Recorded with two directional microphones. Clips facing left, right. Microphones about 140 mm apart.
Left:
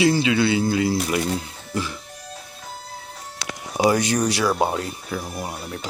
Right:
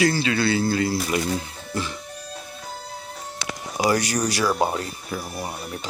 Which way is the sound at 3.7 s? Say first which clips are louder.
Left 3 dB; 20° left (ahead or behind).